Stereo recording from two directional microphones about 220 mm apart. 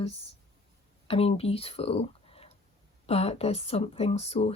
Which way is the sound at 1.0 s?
25° left (ahead or behind).